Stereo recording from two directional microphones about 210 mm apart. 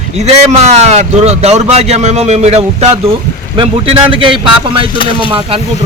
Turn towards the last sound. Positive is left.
turn(degrees=-25)  # may be behind; listen again after turning